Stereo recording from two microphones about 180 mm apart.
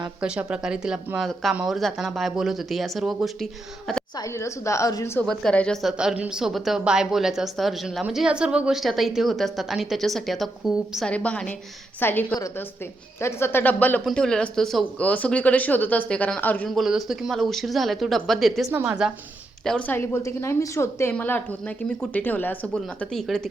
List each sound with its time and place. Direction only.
0.2 s a woman's voice: 5° right (ahead or behind)
4.2 s a woman's voice: 15° left (ahead or behind)
5.2 s a woman's voice: 5° left (ahead or behind)
19.6 s a woman's voice: 10° left (ahead or behind)